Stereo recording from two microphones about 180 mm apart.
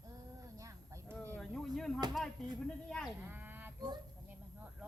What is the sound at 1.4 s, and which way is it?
Speech, centre (ahead or behind).